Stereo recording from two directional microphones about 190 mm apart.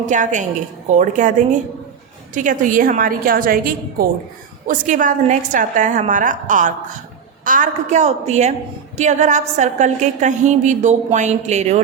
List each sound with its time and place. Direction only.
0.0 s a woman's voice: 40° right (ahead or behind)